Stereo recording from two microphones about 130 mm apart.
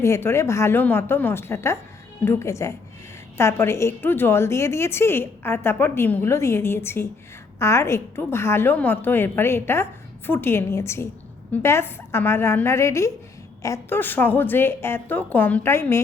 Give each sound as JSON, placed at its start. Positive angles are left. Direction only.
{"t": 0.0, "sound": "a woman's voice", "side_deg": 20}